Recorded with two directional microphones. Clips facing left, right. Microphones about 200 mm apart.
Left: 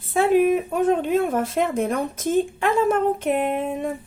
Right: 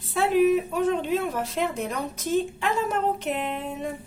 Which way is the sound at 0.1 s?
50° left (ahead or behind).